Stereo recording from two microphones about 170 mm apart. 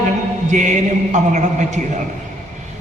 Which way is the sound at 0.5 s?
45° right (ahead or behind).